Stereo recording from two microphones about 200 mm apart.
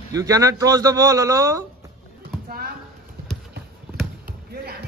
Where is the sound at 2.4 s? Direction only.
50° right (ahead or behind).